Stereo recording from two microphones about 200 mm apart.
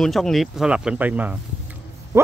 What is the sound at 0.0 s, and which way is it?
Speech, centre (ahead or behind).